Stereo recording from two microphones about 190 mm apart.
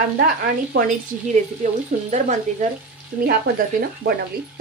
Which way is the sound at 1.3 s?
40° right (ahead or behind).